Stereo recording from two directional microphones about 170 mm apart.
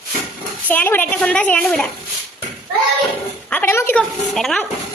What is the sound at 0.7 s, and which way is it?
A child's voice, 10° left (ahead or behind).